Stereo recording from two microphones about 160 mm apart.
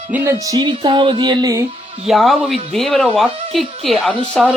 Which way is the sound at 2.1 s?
Centre (ahead or behind).